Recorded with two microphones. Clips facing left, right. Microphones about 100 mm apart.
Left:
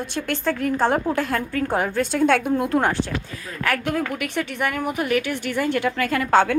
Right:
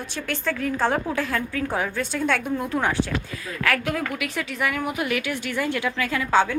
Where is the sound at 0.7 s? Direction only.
25° left (ahead or behind).